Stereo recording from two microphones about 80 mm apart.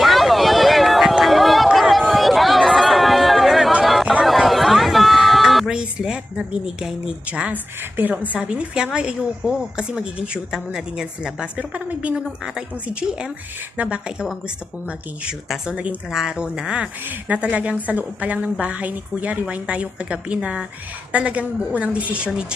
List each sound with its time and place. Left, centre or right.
0.0 s a sound: centre
4.2 s chatter: centre
5.7 s a woman's voice: centre